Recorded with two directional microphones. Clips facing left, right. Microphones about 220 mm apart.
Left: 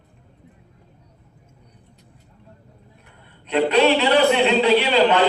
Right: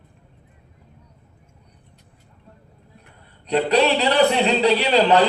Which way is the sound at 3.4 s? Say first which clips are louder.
Left 1 dB; 35° right (ahead or behind).